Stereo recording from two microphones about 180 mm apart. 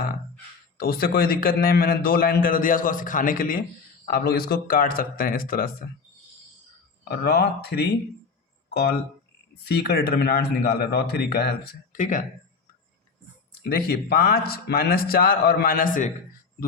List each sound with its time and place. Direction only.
0.8 s a man's voice: 55° left (ahead or behind)
7.1 s a man's voice: 60° left (ahead or behind)
9.6 s a man's voice: 60° left (ahead or behind)
11.9 s speech: 45° left (ahead or behind)
13.5 s a man's voice: 60° left (ahead or behind)